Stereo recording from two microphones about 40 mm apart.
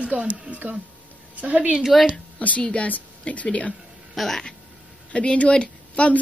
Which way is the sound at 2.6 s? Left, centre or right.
Left.